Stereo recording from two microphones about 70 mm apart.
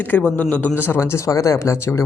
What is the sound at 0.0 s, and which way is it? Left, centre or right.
Speech, left.